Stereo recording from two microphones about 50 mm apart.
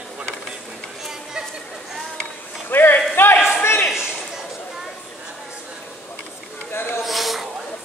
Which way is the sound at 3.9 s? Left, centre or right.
Centre.